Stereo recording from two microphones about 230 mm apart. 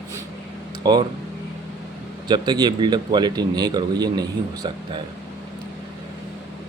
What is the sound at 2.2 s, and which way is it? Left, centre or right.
A man's voice, centre.